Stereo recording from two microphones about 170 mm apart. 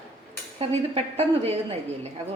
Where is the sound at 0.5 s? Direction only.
35° right (ahead or behind).